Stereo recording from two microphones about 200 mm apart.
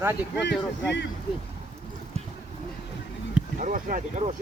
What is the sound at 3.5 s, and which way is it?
Speech, 40° right (ahead or behind).